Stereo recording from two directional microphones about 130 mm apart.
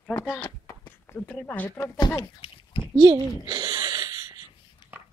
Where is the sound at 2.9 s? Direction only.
30° right (ahead or behind).